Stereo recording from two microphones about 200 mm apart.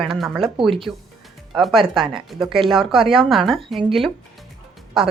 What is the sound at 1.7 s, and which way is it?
Speech, 25° right (ahead or behind).